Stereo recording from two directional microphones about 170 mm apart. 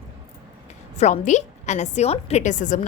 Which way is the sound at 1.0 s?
45° left (ahead or behind).